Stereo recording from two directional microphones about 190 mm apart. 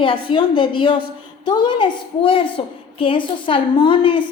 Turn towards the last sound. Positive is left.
turn(degrees=25)  # may be behind; listen again after turning